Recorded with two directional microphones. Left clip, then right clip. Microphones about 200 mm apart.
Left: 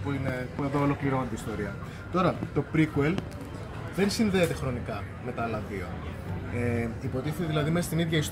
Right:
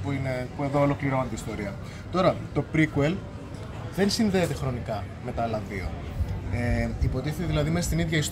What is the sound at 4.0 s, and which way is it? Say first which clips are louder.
Speech: right 1 dB; 25° right (ahead or behind).